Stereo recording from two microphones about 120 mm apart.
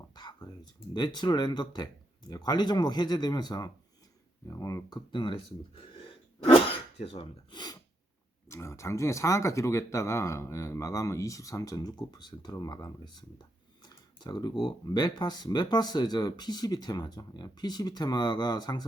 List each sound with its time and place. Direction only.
0.1 s speech: 35° left (ahead or behind)
7.0 s speech: 55° left (ahead or behind)
7.5 s speech: 35° left (ahead or behind)
8.4 s speech: 25° left (ahead or behind)